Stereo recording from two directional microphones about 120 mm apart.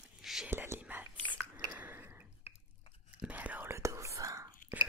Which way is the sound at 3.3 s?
15° right (ahead or behind).